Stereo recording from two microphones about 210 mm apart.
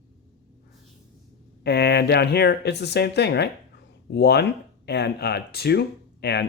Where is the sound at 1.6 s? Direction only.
50° left (ahead or behind).